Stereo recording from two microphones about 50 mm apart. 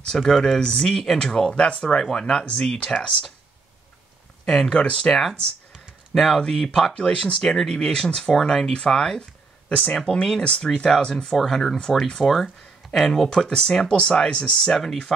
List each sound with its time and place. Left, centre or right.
0.1 s speech: centre
4.5 s speech: centre
7.0 s speech: centre
11.3 s speech: centre